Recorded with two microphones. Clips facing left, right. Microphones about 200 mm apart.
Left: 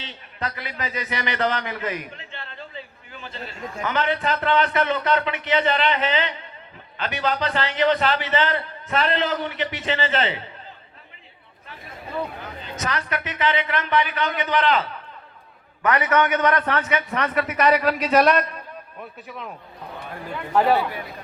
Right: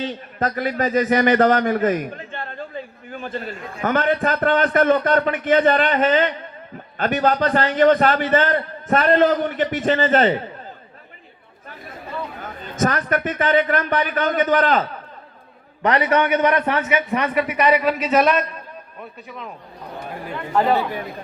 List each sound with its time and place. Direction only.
0.0 s a man's voice: 45° right (ahead or behind)
12.4 s a man's voice: 50° right (ahead or behind)
15.8 s a man's voice: 30° right (ahead or behind)
16.3 s a man's voice: 15° right (ahead or behind); by 20.8 s 5° left (ahead or behind)